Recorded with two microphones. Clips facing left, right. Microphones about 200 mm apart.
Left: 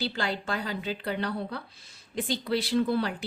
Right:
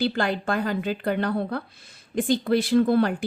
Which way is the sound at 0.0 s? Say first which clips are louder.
Right 7 dB; 55° right (ahead or behind).